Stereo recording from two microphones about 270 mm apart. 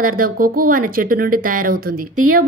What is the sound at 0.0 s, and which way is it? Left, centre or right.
Speech, right.